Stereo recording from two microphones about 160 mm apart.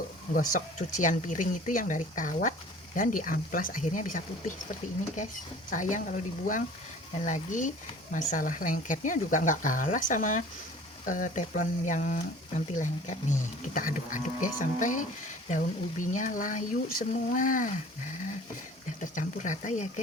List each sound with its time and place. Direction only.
0.3 s speech: 50° left (ahead or behind)
18.9 s speech: 50° left (ahead or behind)